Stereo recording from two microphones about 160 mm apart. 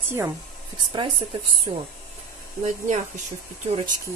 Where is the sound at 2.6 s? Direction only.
50° right (ahead or behind).